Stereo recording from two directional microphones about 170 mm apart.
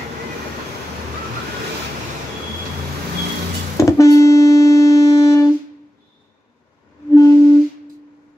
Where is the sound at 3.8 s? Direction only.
20° left (ahead or behind).